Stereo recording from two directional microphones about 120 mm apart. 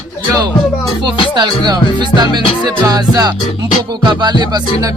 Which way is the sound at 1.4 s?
35° right (ahead or behind).